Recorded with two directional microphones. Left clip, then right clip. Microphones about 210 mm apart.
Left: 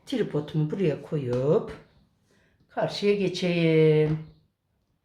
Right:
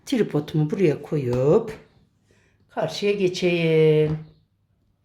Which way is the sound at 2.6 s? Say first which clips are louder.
Right 1 dB; 25° right (ahead or behind).